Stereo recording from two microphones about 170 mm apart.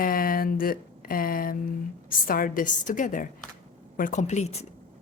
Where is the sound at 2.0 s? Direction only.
55° left (ahead or behind).